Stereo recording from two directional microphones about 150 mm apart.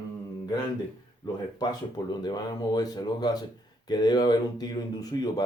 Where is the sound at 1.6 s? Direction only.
25° left (ahead or behind).